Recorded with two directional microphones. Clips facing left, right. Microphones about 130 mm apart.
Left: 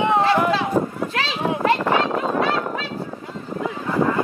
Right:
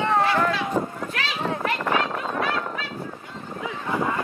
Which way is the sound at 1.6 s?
25° left (ahead or behind).